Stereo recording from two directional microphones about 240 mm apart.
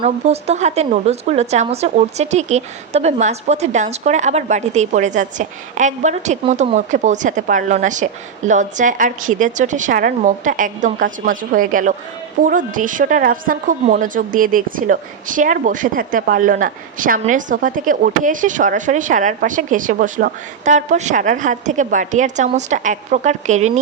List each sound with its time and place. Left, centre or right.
0.0 s a woman's voice: right